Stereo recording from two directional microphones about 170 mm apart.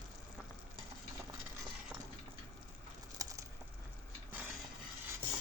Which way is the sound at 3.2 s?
20° right (ahead or behind).